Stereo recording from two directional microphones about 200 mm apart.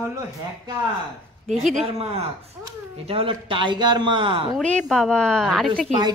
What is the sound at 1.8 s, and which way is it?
Speech, 30° right (ahead or behind).